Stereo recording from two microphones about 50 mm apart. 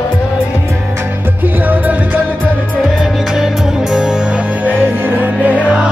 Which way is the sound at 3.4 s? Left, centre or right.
Centre.